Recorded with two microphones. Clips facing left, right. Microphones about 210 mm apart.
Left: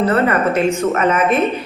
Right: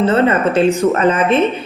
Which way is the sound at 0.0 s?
25° right (ahead or behind).